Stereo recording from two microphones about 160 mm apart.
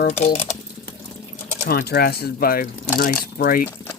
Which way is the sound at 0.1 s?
45° left (ahead or behind).